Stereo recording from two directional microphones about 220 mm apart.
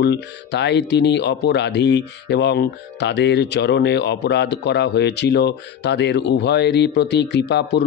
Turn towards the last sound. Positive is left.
turn(degrees=50)  # may be behind; listen again after turning